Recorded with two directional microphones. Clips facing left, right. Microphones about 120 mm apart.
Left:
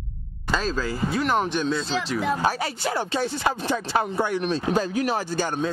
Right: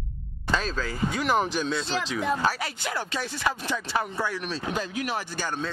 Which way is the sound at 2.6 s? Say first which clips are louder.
Left 5 dB; 30° left (ahead or behind).